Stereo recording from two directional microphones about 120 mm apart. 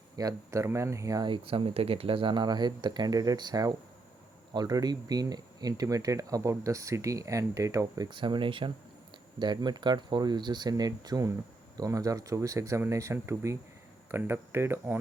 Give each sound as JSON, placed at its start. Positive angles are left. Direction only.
{"t": 0.2, "sound": "speech", "side_deg": -30}
{"t": 1.3, "sound": "speech", "side_deg": -50}